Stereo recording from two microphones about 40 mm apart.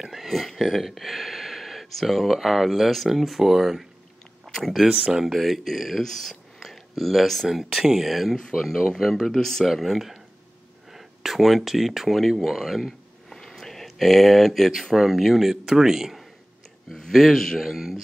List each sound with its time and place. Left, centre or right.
0.0 s a sound: centre
0.6 s speech: centre
4.5 s a sound: centre
5.0 s speech: centre
7.4 s speech: centre
9.7 s speech: centre
13.4 s a sound: centre
14.7 s speech: centre
17.1 s speech: centre